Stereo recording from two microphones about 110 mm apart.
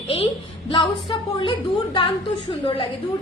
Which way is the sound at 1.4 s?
50° left (ahead or behind).